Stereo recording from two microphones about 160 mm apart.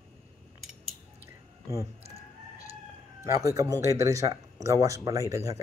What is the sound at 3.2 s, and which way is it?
Speech, 20° right (ahead or behind).